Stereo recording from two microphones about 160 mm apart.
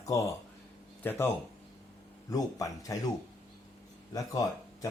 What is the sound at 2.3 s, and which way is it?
Speech, 20° left (ahead or behind).